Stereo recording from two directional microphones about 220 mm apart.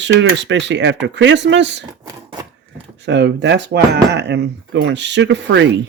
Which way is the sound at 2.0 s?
15° right (ahead or behind).